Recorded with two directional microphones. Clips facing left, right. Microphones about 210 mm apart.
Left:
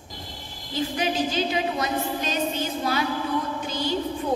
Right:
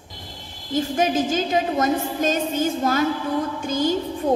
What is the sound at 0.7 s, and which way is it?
A woman's voice, 45° right (ahead or behind).